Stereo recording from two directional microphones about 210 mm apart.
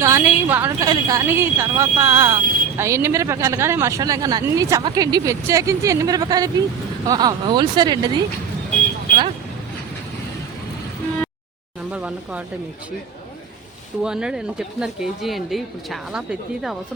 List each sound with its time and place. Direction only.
0.0 s a woman's voice: 10° right (ahead or behind)
11.9 s a sound: 5° right (ahead or behind)
14.0 s speech: 5° right (ahead or behind)